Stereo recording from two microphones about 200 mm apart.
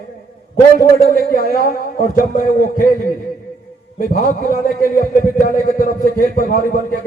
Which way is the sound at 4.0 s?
45° left (ahead or behind).